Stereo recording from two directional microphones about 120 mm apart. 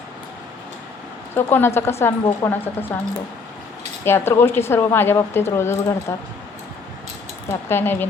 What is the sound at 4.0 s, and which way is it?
A woman's voice, 20° left (ahead or behind).